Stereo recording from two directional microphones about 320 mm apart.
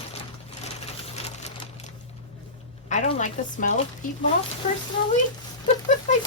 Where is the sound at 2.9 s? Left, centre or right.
Left.